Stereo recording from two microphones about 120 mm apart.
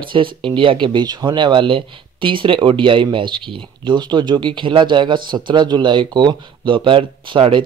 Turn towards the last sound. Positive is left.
turn(degrees=-50)  # may be behind; listen again after turning